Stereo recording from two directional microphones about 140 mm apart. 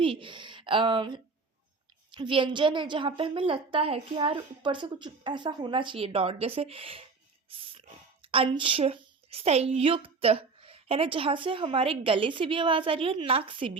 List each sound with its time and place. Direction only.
0.0 s a woman's voice: 40° right (ahead or behind)